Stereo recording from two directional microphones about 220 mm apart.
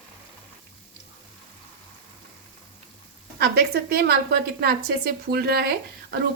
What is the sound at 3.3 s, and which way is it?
A woman's voice, 45° right (ahead or behind).